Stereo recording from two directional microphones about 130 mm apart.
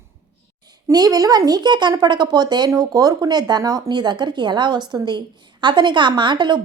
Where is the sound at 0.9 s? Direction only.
30° right (ahead or behind).